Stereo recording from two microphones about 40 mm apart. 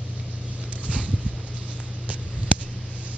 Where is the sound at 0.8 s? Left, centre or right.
Right.